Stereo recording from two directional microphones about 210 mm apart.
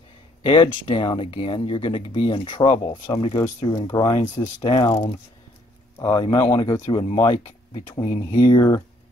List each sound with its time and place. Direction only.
0.4 s speech: 20° left (ahead or behind)